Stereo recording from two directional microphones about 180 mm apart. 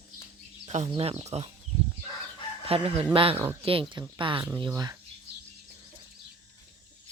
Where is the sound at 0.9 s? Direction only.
30° right (ahead or behind).